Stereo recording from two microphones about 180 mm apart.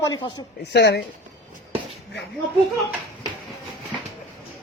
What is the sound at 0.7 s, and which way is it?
Speech, 70° left (ahead or behind).